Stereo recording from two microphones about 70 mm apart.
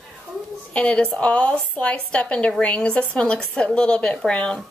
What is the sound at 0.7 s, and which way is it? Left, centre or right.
A woman's voice, centre.